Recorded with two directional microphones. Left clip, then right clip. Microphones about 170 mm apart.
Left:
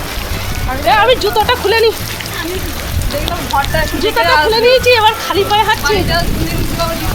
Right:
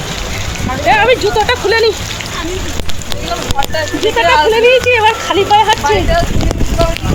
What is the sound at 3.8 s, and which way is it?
Speech, 25° right (ahead or behind).